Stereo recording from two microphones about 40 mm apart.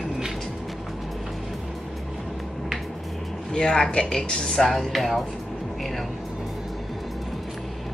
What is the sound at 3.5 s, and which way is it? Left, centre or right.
Speech, centre.